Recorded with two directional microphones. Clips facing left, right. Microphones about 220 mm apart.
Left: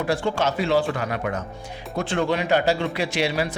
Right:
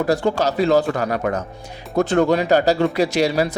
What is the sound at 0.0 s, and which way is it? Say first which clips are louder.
A man's voice: right 5 dB; 40° right (ahead or behind).